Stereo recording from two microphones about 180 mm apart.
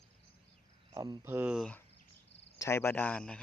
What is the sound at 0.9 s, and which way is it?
Speech, 20° right (ahead or behind).